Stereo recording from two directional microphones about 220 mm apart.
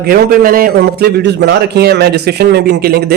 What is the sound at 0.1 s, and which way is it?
Speech, 40° right (ahead or behind).